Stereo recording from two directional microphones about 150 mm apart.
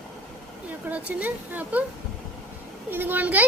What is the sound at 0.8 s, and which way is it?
Speech, 10° right (ahead or behind).